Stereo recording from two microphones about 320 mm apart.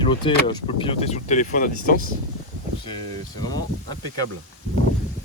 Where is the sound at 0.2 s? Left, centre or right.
Centre.